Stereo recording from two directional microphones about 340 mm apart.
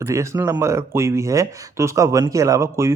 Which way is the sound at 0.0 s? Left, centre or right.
Centre.